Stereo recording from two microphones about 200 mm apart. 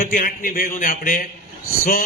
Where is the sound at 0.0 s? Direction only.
45° left (ahead or behind).